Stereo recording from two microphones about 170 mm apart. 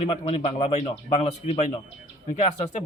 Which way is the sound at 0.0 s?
35° left (ahead or behind).